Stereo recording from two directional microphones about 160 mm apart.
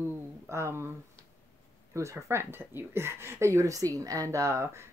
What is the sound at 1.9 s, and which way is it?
Speech, 20° right (ahead or behind).